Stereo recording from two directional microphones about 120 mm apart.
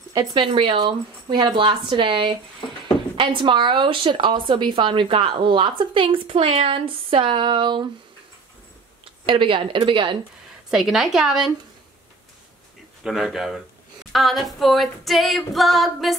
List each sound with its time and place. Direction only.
0.1 s a woman's voice: 35° right (ahead or behind)
9.2 s a woman's voice: 45° right (ahead or behind)
10.7 s female singing: 5° right (ahead or behind)
13.0 s female singing: 5° right (ahead or behind)